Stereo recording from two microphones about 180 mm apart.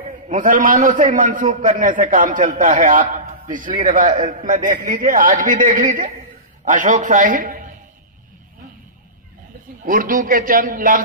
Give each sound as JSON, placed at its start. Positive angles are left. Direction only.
{"t": 0.3, "sound": "a man's voice", "side_deg": -45}
{"t": 9.8, "sound": "a man's voice", "side_deg": -50}